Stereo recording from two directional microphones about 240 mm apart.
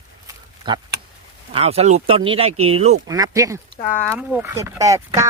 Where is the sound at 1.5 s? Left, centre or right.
Right.